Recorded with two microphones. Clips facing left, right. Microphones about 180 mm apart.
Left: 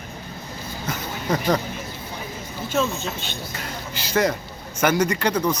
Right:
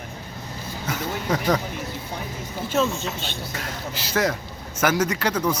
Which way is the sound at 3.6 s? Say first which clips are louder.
Right 1 dB; centre (ahead or behind).